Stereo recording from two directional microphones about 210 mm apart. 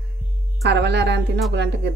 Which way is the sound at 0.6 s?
55° right (ahead or behind).